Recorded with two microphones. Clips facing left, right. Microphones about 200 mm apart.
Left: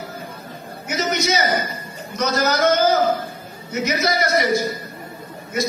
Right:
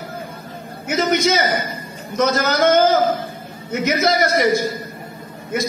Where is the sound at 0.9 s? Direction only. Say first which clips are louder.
Right 4 dB; 50° right (ahead or behind).